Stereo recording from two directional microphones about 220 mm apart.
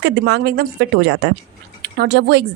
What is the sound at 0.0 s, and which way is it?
A woman's voice, 50° right (ahead or behind).